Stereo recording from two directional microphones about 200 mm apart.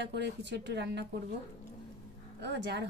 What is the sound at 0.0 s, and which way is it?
Speech, 60° right (ahead or behind).